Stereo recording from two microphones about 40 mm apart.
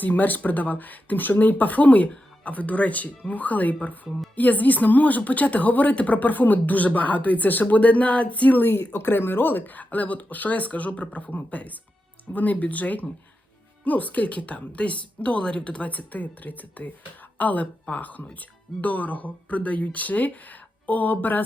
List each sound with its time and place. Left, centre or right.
0.0 s a woman's voice: left
8.6 s a woman's voice: left